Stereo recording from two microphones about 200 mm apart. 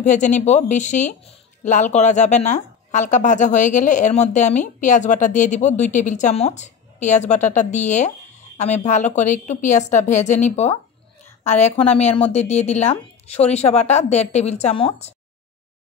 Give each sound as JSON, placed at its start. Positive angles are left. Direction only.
{"t": 0.0, "sound": "speech", "side_deg": 40}
{"t": 11.9, "sound": "speech", "side_deg": 30}